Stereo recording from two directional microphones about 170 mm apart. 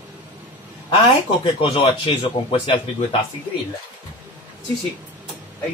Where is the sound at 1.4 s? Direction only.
30° left (ahead or behind).